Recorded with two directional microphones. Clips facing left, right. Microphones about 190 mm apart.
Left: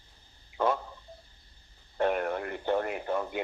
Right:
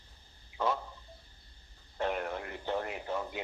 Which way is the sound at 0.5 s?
55° left (ahead or behind).